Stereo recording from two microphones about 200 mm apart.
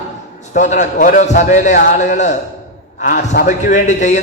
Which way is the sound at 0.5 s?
40° left (ahead or behind).